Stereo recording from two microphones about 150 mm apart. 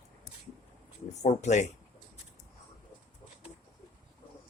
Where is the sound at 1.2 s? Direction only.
50° left (ahead or behind).